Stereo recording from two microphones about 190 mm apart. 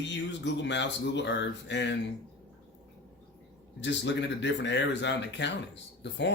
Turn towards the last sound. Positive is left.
turn(degrees=65)  # may be behind; listen again after turning